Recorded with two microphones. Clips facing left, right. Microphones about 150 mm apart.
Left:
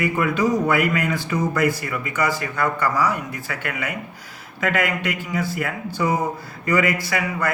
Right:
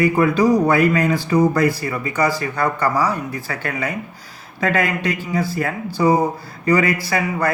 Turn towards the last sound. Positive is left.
turn(degrees=-35)  # may be behind; listen again after turning